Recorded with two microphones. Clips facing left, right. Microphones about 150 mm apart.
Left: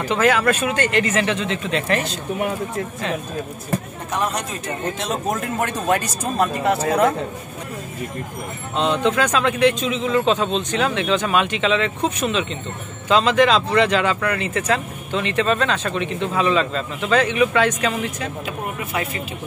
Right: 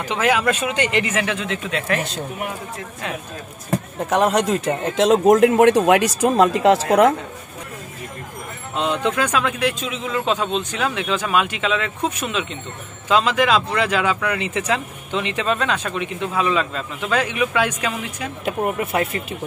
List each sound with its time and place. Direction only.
0.0 s speech: 15° right (ahead or behind)
4.1 s a man's voice: 90° right
8.7 s speech: 10° right (ahead or behind)
18.4 s speech: 50° right (ahead or behind)